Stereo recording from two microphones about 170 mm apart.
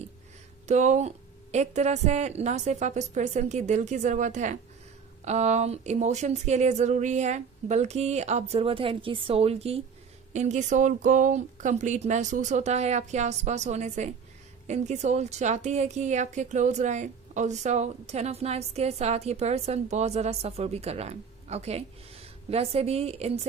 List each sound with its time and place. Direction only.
0.7 s a woman's voice: 45° right (ahead or behind)